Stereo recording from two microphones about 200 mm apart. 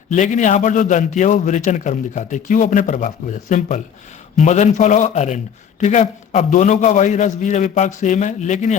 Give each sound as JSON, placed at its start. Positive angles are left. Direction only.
{"t": 0.1, "sound": "a man's voice", "side_deg": 35}